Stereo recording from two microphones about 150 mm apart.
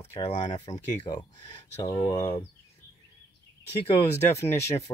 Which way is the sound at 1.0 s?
30° left (ahead or behind).